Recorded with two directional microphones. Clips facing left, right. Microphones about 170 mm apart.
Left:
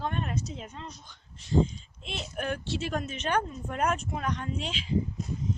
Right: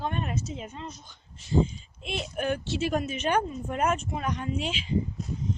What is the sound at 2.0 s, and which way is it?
Speech, 5° right (ahead or behind).